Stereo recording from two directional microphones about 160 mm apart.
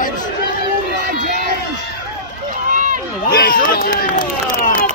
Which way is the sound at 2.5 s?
55° right (ahead or behind).